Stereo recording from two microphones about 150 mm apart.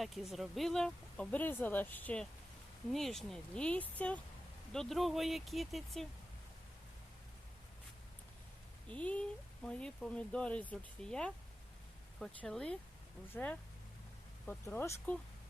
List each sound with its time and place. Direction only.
0.0 s speech: centre (ahead or behind)
8.9 s speech: 10° left (ahead or behind)